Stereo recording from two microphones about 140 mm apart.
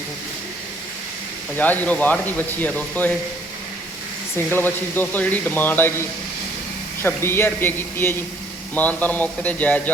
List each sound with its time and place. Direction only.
1.5 s a man's voice: 10° left (ahead or behind)
4.4 s a man's voice: 15° left (ahead or behind)